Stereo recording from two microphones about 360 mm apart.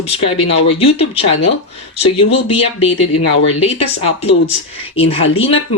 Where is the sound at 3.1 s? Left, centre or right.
Left.